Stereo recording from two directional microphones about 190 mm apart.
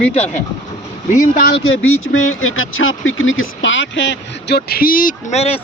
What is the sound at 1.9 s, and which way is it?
Speech, 90° left.